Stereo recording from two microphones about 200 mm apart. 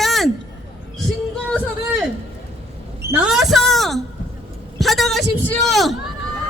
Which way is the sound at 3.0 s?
5° right (ahead or behind).